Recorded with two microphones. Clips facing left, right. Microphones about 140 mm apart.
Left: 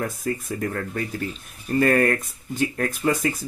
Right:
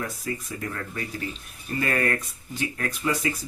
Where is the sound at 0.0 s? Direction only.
50° left (ahead or behind).